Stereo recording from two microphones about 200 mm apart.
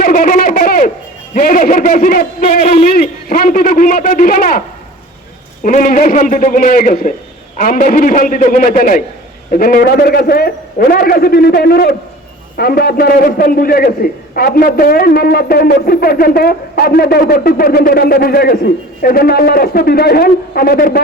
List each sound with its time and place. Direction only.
0.0 s a sound: 45° left (ahead or behind)
1.3 s a man's voice: 40° left (ahead or behind)
2.4 s a man's voice: 30° left (ahead or behind)
5.6 s a man's voice: 45° left (ahead or behind)